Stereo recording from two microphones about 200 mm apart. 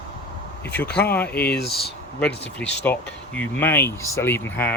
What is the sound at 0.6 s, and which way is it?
Speech, 10° left (ahead or behind).